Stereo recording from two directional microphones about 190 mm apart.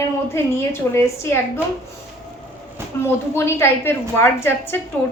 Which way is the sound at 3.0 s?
15° left (ahead or behind).